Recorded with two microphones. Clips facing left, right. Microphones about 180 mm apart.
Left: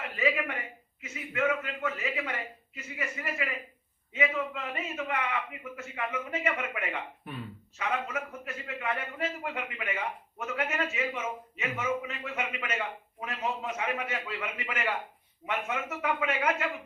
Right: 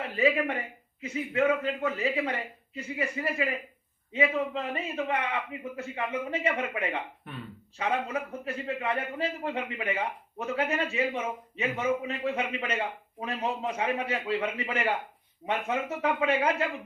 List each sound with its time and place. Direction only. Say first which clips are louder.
0.2 s a man's voice: right 4 dB; 30° right (ahead or behind)
7.3 s speech: left 1 dB; 5° left (ahead or behind)
7.8 s a man's voice: right 3 dB; 30° right (ahead or behind)